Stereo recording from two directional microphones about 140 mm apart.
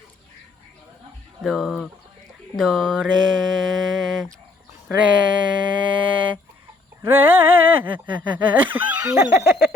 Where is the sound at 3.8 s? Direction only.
Centre (ahead or behind).